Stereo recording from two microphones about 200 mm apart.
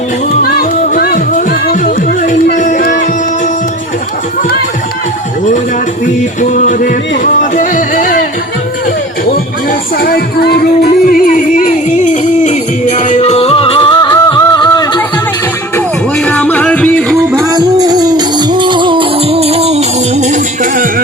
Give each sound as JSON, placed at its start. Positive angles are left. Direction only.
{"t": 0.4, "sound": "music", "side_deg": 50}
{"t": 6.4, "sound": "music", "side_deg": 40}
{"t": 9.6, "sound": "music", "side_deg": 50}
{"t": 15.7, "sound": "music", "side_deg": 5}
{"t": 17.3, "sound": "music", "side_deg": -15}